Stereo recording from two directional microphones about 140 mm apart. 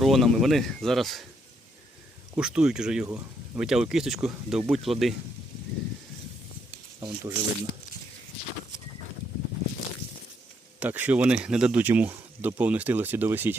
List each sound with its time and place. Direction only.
0.0 s speech: centre (ahead or behind)
2.3 s speech: 5° right (ahead or behind)
3.1 s speech: 15° right (ahead or behind)
3.6 s speech: 5° right (ahead or behind)
7.0 s speech: 30° right (ahead or behind)
10.8 s speech: 10° right (ahead or behind)